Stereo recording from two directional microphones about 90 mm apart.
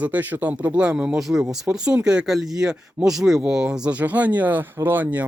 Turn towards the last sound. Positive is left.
turn(degrees=-20)  # may be behind; listen again after turning